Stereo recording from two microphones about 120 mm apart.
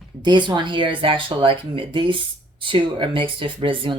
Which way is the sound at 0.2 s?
40° right (ahead or behind).